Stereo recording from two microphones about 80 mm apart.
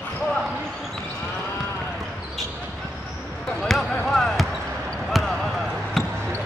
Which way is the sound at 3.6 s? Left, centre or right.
Centre.